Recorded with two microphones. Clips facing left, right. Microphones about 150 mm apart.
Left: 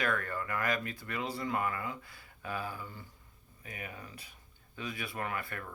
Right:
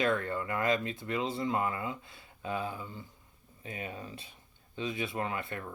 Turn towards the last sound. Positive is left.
turn(degrees=-25)  # may be behind; listen again after turning